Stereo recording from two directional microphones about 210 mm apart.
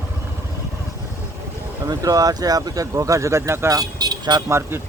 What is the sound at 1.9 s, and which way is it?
Speech, 15° right (ahead or behind).